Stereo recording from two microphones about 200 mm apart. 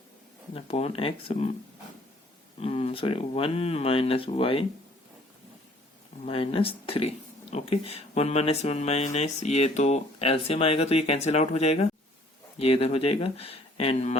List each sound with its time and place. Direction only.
0.5 s speech: 30° left (ahead or behind)
2.6 s speech: 30° left (ahead or behind)
6.2 s speech: 25° left (ahead or behind)